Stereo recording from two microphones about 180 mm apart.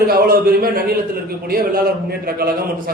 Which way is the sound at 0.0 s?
60° right (ahead or behind).